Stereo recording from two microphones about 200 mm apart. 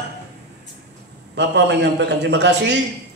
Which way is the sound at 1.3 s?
60° right (ahead or behind).